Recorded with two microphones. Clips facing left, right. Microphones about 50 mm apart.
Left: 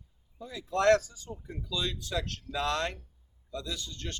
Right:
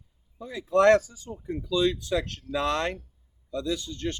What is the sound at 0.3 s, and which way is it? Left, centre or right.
Speech, right.